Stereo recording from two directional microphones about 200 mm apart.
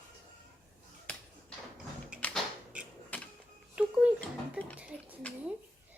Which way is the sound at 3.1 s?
10° left (ahead or behind).